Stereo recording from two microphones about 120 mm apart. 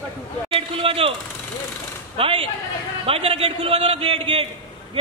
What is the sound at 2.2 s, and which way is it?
A man's voice, 50° right (ahead or behind).